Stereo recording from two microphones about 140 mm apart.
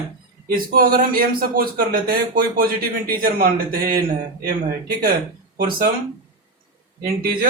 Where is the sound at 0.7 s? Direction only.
90° right.